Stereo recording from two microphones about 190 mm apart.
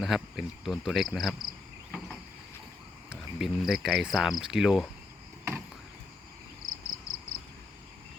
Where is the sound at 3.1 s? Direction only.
Centre (ahead or behind).